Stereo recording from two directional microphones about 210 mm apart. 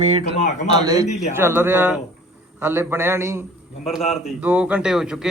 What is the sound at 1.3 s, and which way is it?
A man's voice, 10° right (ahead or behind).